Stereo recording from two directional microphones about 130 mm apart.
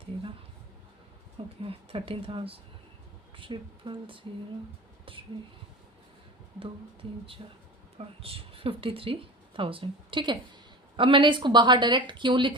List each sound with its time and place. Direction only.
1.6 s a woman's voice: 45° right (ahead or behind)
6.6 s a woman's voice: 45° right (ahead or behind)